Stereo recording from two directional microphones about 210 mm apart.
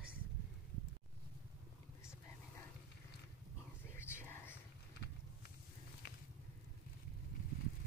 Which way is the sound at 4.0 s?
10° left (ahead or behind).